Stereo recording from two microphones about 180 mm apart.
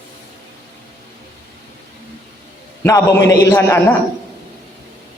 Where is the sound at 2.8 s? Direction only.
20° left (ahead or behind).